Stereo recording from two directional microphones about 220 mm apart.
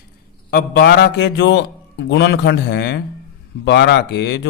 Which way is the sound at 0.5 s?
45° left (ahead or behind).